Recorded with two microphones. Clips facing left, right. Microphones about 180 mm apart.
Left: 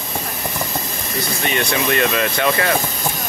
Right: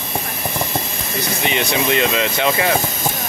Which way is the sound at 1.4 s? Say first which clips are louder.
Right 1 dB; 15° right (ahead or behind).